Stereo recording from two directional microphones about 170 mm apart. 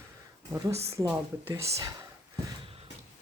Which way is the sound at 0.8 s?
15° right (ahead or behind).